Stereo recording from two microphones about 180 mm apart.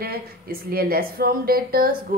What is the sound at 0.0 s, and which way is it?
A woman's voice, 55° right (ahead or behind).